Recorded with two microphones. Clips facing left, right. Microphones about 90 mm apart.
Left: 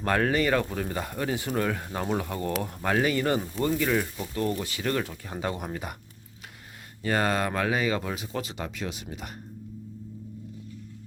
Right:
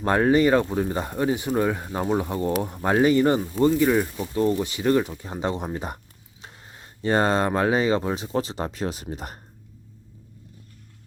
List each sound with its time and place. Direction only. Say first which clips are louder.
0.0 s speech: right 6 dB; 25° right (ahead or behind)
7.0 s speech: right 5 dB; 30° right (ahead or behind)